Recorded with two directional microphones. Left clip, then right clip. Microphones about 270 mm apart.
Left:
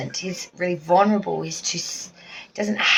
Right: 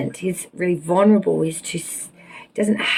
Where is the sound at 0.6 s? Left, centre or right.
Centre.